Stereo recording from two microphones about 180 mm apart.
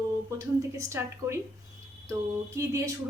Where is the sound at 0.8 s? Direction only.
15° right (ahead or behind).